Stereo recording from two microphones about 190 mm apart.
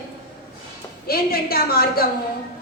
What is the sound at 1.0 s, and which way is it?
A woman's voice, 50° left (ahead or behind).